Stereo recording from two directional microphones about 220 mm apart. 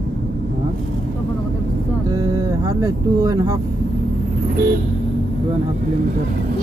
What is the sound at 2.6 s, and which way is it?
Speech, 15° right (ahead or behind).